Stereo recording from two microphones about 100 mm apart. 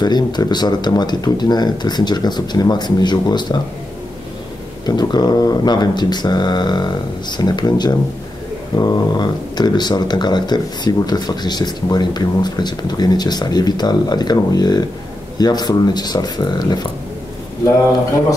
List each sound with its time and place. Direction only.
0.0 s speech: 45° left (ahead or behind)
4.8 s speech: 45° left (ahead or behind)